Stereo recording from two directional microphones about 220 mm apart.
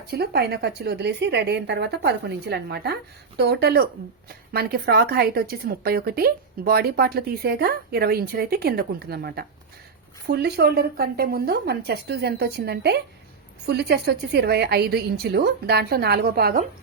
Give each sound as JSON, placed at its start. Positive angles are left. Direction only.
{"t": 0.1, "sound": "a woman's voice", "side_deg": -45}